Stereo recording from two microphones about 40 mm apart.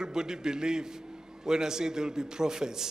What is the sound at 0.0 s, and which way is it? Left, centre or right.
A man's voice, centre.